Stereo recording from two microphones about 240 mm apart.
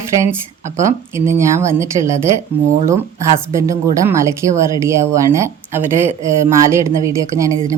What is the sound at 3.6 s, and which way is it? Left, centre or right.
Speech, centre.